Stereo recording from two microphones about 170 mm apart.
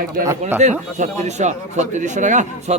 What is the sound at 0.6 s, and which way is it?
Speech, 45° right (ahead or behind).